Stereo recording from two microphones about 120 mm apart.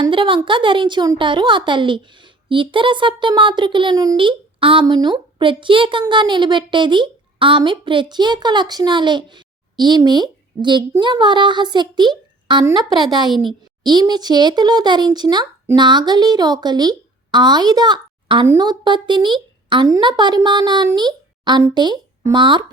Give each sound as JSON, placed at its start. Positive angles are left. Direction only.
{"t": 0.0, "sound": "a woman's voice", "side_deg": -45}